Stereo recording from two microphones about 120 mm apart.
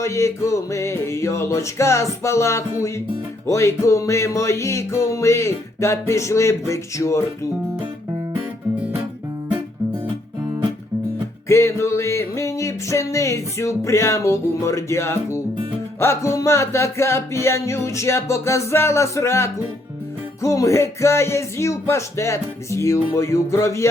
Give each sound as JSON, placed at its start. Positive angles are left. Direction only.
{"t": 0.0, "sound": "music", "side_deg": 25}
{"t": 11.4, "sound": "music", "side_deg": 25}